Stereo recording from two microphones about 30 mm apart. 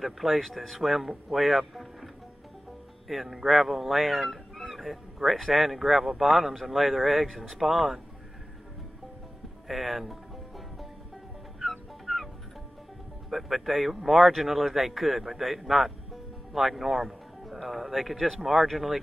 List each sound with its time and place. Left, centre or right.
0.0 s speech: centre
3.1 s speech: centre
9.7 s speech: centre
11.6 s music: centre
13.3 s speech: centre